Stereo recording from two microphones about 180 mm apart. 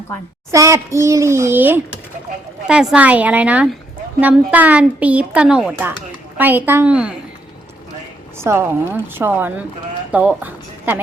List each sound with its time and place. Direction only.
0.5 s a child's voice: 15° right (ahead or behind)
8.4 s a child's voice: 15° right (ahead or behind)